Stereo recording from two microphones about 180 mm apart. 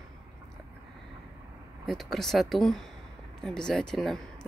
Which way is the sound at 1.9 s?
Centre (ahead or behind).